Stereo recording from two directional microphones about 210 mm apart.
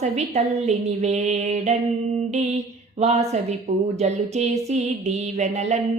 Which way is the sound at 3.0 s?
30° right (ahead or behind).